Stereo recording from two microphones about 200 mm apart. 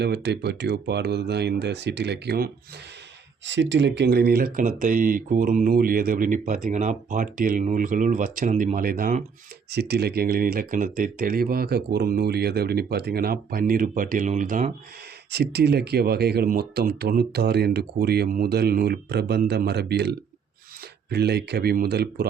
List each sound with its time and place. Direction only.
0.0 s speech: 55° right (ahead or behind)
9.6 s speech: 55° right (ahead or behind)
15.3 s speech: 55° right (ahead or behind)